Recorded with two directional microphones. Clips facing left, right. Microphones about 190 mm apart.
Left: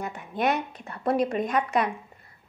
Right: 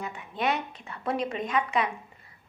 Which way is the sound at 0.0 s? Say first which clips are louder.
Left 3 dB; 50° left (ahead or behind).